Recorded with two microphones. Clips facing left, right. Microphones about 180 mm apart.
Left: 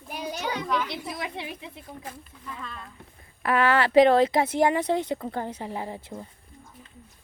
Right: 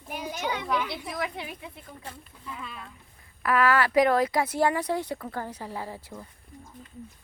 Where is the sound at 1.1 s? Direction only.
25° left (ahead or behind).